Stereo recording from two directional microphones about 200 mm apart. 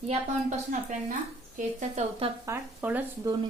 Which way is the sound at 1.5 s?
40° right (ahead or behind).